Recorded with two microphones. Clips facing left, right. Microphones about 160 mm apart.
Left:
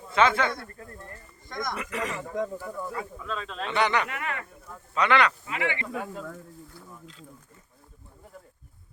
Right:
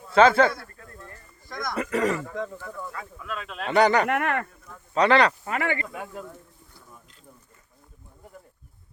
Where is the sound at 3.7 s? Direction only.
40° right (ahead or behind).